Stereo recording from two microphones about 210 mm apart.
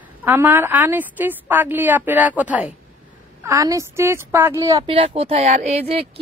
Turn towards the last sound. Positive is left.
turn(degrees=-30)  # may be behind; listen again after turning